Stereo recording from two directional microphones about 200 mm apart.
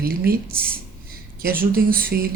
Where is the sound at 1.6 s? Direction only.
45° right (ahead or behind).